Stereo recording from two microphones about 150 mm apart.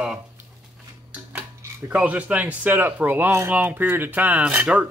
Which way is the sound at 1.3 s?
10° right (ahead or behind).